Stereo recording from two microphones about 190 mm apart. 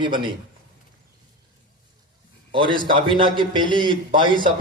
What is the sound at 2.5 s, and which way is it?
A man's voice, 25° right (ahead or behind).